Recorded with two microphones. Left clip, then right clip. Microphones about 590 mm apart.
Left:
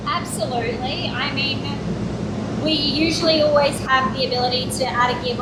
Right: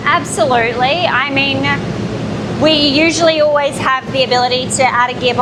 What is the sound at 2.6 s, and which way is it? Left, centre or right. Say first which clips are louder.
A woman's voice: right 9 dB; right.